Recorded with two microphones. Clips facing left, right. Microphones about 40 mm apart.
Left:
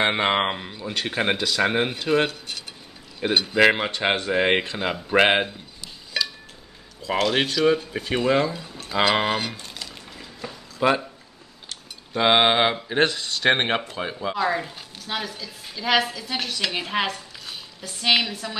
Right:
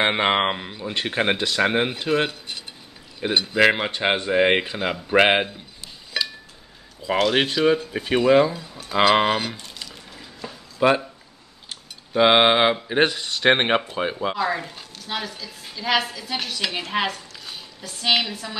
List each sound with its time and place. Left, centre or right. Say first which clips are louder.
0.0 s speech: right 1 dB; centre
7.2 s speech: right 1 dB; centre
12.1 s speech: right 2 dB; centre
14.3 s a woman's voice: even; centre